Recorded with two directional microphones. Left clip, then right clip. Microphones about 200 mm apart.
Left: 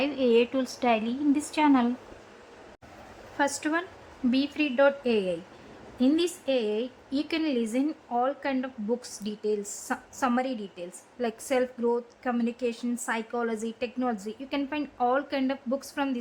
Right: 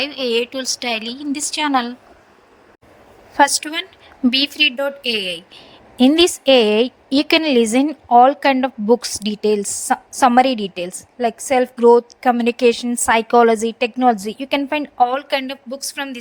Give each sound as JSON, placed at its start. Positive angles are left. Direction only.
{"t": 0.0, "sound": "a woman's voice", "side_deg": -35}
{"t": 3.4, "sound": "a woman's voice", "side_deg": -35}